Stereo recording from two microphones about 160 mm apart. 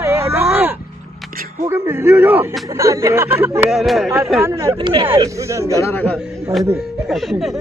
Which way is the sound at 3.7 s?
Centre (ahead or behind).